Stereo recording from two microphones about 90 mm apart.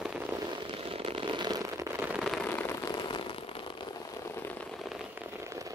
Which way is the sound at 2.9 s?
60° left (ahead or behind).